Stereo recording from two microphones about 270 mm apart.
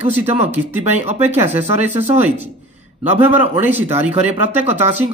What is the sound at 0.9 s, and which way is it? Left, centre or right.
Speech, right.